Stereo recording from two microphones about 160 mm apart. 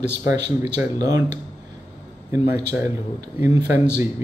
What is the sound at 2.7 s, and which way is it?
Speech, 20° right (ahead or behind).